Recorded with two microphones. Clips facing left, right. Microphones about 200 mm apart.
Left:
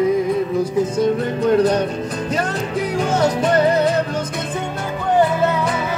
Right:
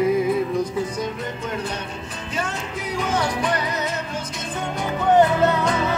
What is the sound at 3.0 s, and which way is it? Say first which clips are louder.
Music: left 5 dB; 45° left (ahead or behind).